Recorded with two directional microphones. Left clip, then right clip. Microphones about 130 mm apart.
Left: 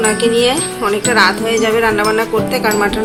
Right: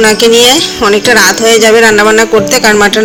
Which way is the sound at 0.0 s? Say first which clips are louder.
Right 8 dB; 55° right (ahead or behind).